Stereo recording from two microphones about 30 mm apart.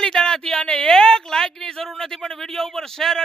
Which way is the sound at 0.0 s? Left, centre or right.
Left.